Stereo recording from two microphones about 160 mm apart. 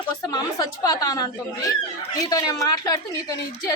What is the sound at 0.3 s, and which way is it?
A woman's voice, 25° left (ahead or behind).